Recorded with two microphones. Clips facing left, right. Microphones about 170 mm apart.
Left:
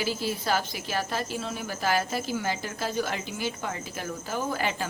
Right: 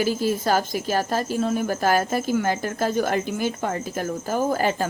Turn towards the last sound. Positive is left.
turn(degrees=-45)  # may be behind; listen again after turning